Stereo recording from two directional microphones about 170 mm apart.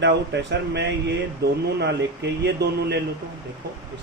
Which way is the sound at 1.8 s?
85° right.